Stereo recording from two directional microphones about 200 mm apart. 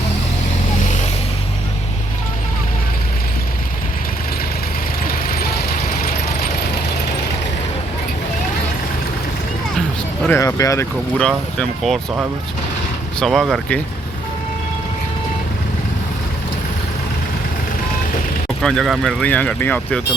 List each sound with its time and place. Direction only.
5.0 s vehicle: 45° left (ahead or behind)
10.2 s speech: 15° left (ahead or behind)
11.2 s speech: 5° left (ahead or behind)
18.6 s speech: centre (ahead or behind)